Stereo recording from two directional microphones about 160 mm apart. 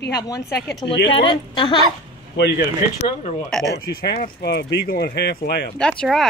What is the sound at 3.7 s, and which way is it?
Speech, 80° left.